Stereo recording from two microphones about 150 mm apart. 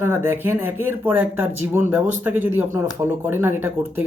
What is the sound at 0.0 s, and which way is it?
Speech, 15° right (ahead or behind).